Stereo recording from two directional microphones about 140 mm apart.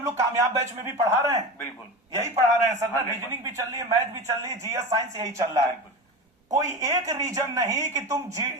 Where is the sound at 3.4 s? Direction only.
25° right (ahead or behind).